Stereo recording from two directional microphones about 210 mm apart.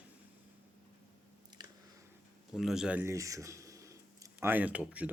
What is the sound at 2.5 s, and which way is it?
Speech, centre (ahead or behind).